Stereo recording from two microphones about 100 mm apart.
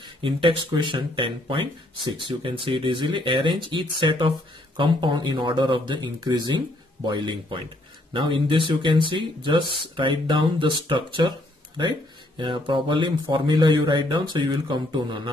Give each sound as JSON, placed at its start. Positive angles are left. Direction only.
{"t": 0.0, "sound": "speech", "side_deg": -60}